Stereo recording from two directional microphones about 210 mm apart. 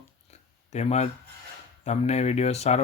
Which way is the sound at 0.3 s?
30° left (ahead or behind).